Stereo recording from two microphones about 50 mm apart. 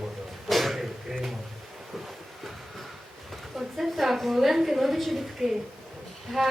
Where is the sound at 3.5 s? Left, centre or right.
Centre.